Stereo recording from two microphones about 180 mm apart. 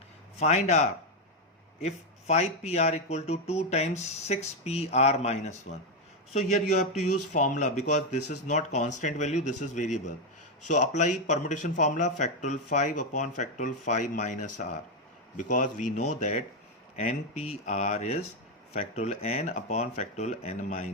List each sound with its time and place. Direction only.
0.3 s a man's voice: 40° left (ahead or behind)